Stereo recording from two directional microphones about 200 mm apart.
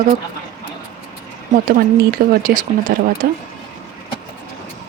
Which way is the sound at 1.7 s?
45° right (ahead or behind).